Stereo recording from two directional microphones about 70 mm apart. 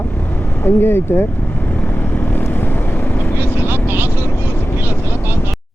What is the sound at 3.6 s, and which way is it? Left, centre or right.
Vehicle, right.